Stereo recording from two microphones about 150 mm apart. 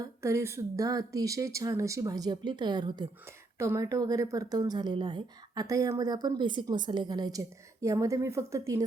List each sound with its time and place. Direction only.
0.0 s a woman's voice: 20° right (ahead or behind)
3.2 s a woman's voice: 20° right (ahead or behind)